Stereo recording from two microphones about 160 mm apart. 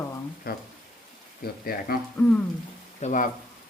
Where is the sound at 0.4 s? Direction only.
70° left (ahead or behind).